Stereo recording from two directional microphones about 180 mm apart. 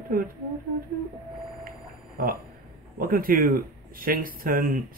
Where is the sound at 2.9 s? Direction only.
50° right (ahead or behind).